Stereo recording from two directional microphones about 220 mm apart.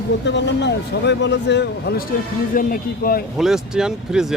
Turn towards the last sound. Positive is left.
turn(degrees=-5)  # may be behind; listen again after turning